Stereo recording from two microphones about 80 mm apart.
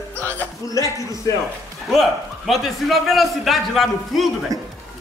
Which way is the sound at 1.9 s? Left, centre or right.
Centre.